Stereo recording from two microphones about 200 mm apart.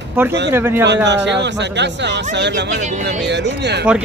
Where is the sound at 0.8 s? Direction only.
60° right (ahead or behind).